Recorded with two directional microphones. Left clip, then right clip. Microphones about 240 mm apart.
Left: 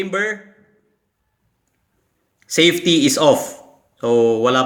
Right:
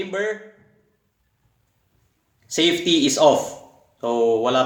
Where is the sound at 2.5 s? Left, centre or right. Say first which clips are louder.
Left 4 dB; left.